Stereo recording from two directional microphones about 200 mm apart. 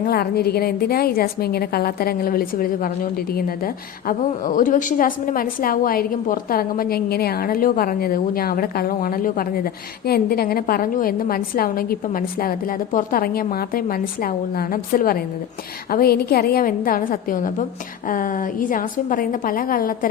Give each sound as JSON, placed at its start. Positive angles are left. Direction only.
{"t": 0.0, "sound": "a woman's voice", "side_deg": 50}